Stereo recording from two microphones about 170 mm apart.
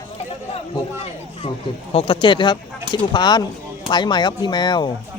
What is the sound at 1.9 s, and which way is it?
Speech, 30° left (ahead or behind).